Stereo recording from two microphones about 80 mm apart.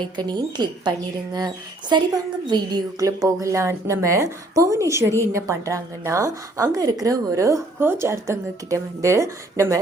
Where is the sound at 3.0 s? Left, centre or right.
Right.